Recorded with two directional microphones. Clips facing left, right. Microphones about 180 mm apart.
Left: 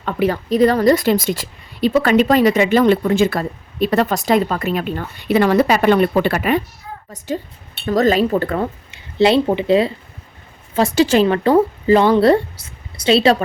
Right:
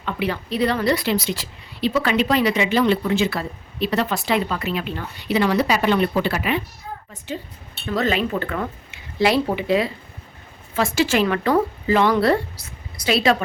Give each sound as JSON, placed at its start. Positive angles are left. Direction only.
{"t": 0.0, "sound": "a woman's voice", "side_deg": 45}
{"t": 7.9, "sound": "a woman's voice", "side_deg": 40}